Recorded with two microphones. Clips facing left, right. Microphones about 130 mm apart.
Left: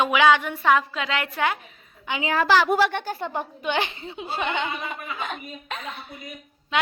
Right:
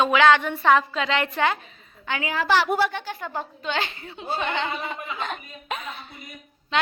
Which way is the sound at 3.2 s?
20° left (ahead or behind).